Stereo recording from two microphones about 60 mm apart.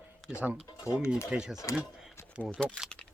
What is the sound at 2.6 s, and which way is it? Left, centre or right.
Speech, centre.